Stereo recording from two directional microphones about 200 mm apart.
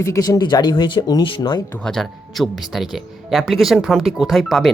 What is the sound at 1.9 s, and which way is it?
Speech, centre (ahead or behind).